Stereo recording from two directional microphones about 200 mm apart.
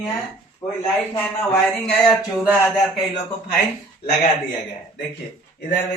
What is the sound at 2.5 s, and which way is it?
Speech, centre (ahead or behind).